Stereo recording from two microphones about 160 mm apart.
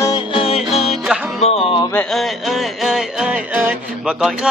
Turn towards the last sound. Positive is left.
turn(degrees=-5)  # may be behind; listen again after turning